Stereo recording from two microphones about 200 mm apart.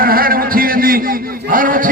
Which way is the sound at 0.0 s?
45° right (ahead or behind).